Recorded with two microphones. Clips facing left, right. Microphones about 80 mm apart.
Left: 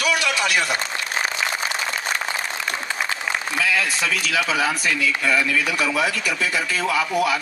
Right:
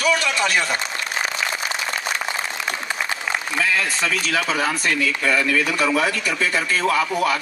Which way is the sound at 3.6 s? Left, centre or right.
Right.